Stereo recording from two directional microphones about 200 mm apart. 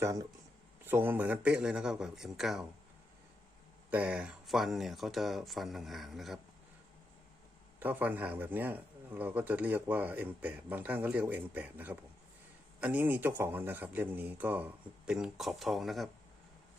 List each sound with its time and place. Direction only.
0.0 s speech: 15° right (ahead or behind); by 2.6 s centre (ahead or behind)
3.8 s speech: 5° right (ahead or behind)
7.8 s speech: 10° right (ahead or behind)